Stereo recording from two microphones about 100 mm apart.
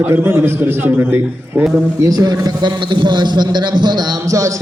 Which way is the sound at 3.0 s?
50° right (ahead or behind).